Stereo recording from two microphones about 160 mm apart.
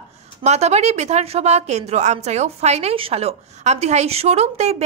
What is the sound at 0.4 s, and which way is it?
A woman's voice, 45° right (ahead or behind).